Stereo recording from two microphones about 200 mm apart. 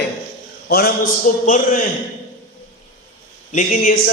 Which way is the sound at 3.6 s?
40° left (ahead or behind).